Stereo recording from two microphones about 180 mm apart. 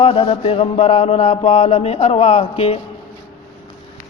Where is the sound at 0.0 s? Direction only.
30° left (ahead or behind).